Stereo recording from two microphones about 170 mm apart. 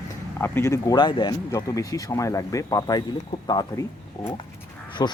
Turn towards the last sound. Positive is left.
turn(degrees=25)  # may be behind; listen again after turning